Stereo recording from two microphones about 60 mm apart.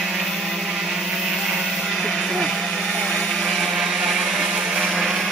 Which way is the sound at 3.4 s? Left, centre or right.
Centre.